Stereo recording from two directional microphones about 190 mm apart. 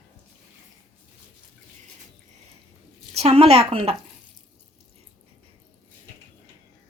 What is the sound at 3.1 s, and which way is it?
Speech, 35° right (ahead or behind).